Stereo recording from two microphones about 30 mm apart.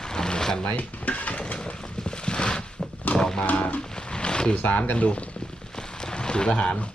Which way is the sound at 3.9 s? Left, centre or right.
Left.